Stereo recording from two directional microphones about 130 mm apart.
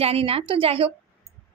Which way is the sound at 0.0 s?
45° right (ahead or behind).